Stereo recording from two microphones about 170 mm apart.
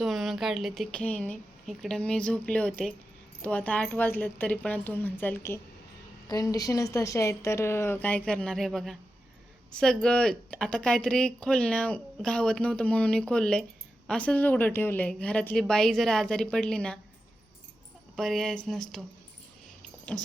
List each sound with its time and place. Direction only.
0.0 s a woman's voice: centre (ahead or behind)
18.2 s speech: 5° left (ahead or behind)
20.1 s speech: centre (ahead or behind)